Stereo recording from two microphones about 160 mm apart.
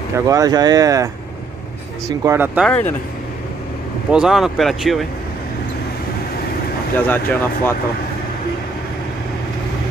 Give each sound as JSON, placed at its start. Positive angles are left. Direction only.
{"t": 0.1, "sound": "speech", "side_deg": -20}
{"t": 2.6, "sound": "speech", "side_deg": 10}
{"t": 4.1, "sound": "speech", "side_deg": -5}
{"t": 7.0, "sound": "speech", "side_deg": 10}